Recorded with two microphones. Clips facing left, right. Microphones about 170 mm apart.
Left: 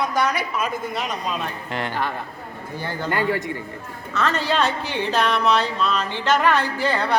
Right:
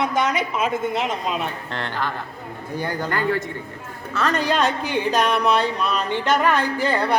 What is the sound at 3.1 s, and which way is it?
Speech, 15° left (ahead or behind).